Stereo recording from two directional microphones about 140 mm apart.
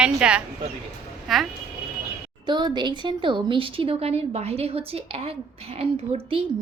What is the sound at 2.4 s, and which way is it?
Speech, 35° right (ahead or behind).